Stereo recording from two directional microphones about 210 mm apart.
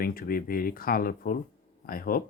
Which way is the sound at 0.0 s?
45° left (ahead or behind).